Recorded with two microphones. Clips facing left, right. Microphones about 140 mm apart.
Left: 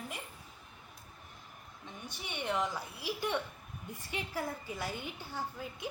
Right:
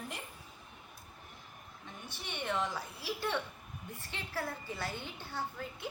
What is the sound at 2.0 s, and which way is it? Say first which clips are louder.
A woman's voice: left 1 dB; 15° left (ahead or behind).